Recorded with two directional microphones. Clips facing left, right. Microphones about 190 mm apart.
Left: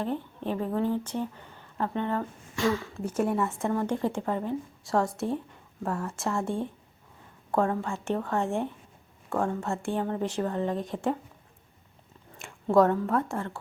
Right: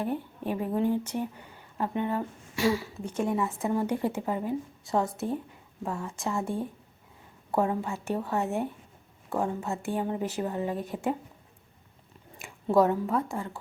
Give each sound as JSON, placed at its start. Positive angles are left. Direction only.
{"t": 0.0, "sound": "a woman's voice", "side_deg": -10}
{"t": 3.0, "sound": "a woman's voice", "side_deg": 5}
{"t": 3.3, "sound": "a woman's voice", "side_deg": -5}
{"t": 7.5, "sound": "a woman's voice", "side_deg": -15}
{"t": 12.7, "sound": "a woman's voice", "side_deg": -5}